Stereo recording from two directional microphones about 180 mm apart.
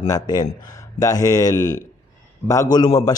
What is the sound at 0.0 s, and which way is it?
Speech, 20° left (ahead or behind).